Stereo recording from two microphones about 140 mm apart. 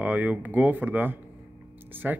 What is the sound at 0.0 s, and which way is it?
Speech, 10° right (ahead or behind).